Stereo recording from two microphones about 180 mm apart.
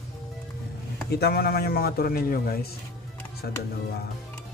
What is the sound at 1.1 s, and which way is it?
Speech, 60° left (ahead or behind).